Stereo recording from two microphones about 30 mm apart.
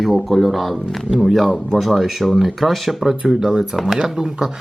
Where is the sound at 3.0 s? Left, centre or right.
Centre.